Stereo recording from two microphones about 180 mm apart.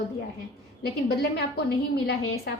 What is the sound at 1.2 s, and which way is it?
Speech, 60° left (ahead or behind).